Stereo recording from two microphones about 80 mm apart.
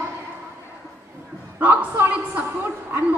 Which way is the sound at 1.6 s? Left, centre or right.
Right.